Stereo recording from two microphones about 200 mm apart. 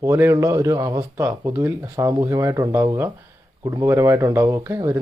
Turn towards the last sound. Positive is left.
turn(degrees=-15)  # may be behind; listen again after turning